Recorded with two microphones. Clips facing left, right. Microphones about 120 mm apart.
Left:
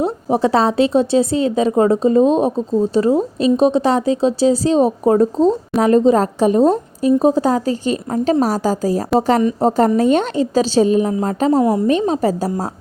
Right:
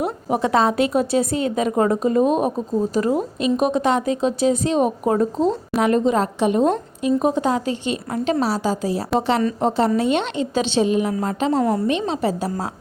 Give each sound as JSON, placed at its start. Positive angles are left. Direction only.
{"t": 0.0, "sound": "a woman's voice", "side_deg": 30}
{"t": 11.3, "sound": "a woman's voice", "side_deg": 40}
{"t": 11.6, "sound": "a woman's voice", "side_deg": 15}
{"t": 11.9, "sound": "a woman's voice", "side_deg": 40}